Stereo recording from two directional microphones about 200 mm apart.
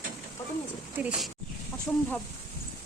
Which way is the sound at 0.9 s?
5° right (ahead or behind).